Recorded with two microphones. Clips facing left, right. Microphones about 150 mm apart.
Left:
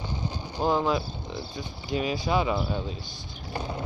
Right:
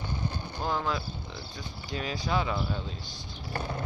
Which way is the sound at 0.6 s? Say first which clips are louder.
Left 7 dB; 20° left (ahead or behind).